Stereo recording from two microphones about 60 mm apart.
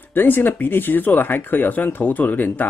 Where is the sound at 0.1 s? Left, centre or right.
Left.